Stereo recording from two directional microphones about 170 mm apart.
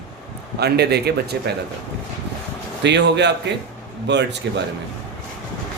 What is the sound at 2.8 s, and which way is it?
A man's voice, 90° right.